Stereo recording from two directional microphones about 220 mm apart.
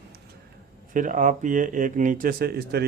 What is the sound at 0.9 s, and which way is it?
Speech, 35° right (ahead or behind).